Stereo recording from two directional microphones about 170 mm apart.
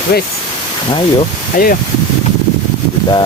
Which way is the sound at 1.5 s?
55° left (ahead or behind).